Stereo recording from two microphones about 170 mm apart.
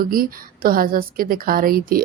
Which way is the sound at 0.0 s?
55° right (ahead or behind).